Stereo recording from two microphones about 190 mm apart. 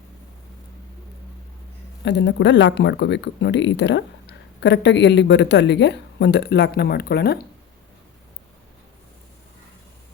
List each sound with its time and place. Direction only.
2.0 s speech: 65° left (ahead or behind)